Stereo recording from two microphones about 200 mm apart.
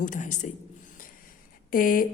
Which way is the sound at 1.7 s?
45° left (ahead or behind).